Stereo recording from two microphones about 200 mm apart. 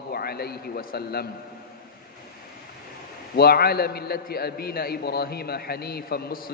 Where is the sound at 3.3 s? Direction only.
50° left (ahead or behind).